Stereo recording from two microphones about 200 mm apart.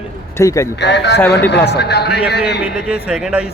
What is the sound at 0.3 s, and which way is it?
Speech, 15° left (ahead or behind).